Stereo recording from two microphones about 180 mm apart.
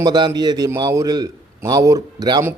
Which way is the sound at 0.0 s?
25° right (ahead or behind).